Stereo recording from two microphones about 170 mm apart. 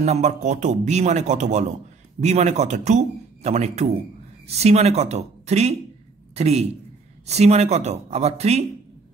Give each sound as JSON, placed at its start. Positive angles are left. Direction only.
{"t": 0.0, "sound": "speech", "side_deg": -40}